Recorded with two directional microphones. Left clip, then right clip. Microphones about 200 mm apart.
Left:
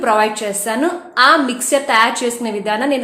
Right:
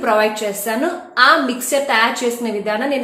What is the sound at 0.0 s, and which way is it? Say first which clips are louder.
A woman's voice: left 1 dB; 20° left (ahead or behind).